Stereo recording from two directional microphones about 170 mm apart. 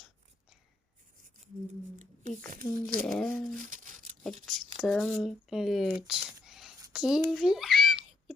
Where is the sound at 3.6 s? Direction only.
50° right (ahead or behind).